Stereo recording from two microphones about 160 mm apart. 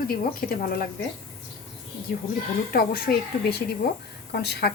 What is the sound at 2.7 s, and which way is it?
A woman's voice, 70° left (ahead or behind).